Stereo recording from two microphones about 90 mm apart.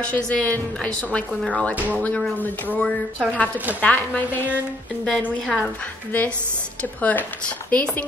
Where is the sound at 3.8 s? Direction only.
20° left (ahead or behind).